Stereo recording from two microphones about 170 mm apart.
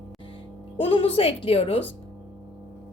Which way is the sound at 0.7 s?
30° left (ahead or behind).